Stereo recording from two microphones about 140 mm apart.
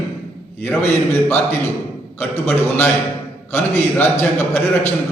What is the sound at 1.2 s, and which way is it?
A man's voice, 15° left (ahead or behind).